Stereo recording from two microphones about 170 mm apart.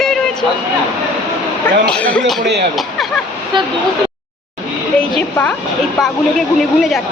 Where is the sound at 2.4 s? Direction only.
85° right.